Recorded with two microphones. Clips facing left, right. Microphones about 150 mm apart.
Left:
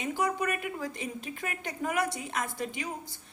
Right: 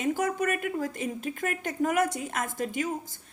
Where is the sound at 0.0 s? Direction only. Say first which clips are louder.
Right 3 dB; 45° right (ahead or behind).